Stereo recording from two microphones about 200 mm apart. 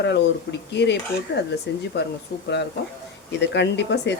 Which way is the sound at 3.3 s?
60° left (ahead or behind).